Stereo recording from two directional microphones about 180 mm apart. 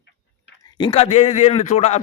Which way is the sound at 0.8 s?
25° left (ahead or behind).